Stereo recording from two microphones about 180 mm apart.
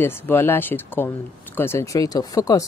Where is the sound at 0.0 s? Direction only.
10° left (ahead or behind).